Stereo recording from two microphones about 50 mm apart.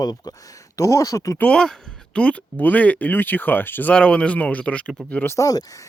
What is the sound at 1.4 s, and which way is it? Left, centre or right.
Speech, centre.